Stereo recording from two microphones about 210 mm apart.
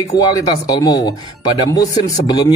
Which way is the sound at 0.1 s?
20° left (ahead or behind).